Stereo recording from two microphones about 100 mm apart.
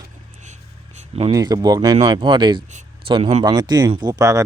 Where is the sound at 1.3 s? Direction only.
40° right (ahead or behind).